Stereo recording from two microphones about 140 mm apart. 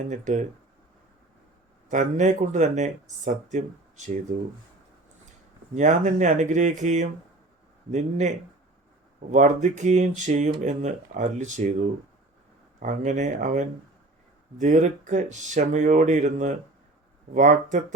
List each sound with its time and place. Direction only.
0.0 s speech: 55° right (ahead or behind)
1.9 s speech: 60° right (ahead or behind)
5.7 s speech: 60° right (ahead or behind)
9.3 s speech: 60° right (ahead or behind)